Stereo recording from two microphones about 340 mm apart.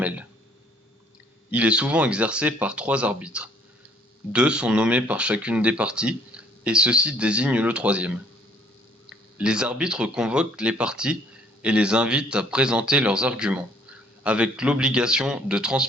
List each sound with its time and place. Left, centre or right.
1.5 s speech: centre